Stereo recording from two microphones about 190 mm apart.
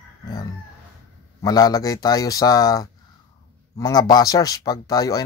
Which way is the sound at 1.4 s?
20° left (ahead or behind).